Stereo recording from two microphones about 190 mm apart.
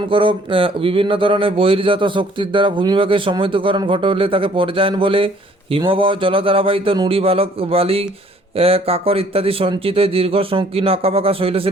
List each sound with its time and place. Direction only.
0.1 s speech: 25° right (ahead or behind)